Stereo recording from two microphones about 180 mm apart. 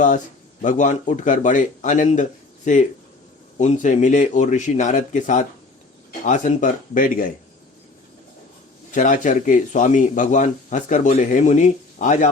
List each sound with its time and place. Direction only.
0.6 s speech: 45° left (ahead or behind)
8.9 s speech: 45° left (ahead or behind)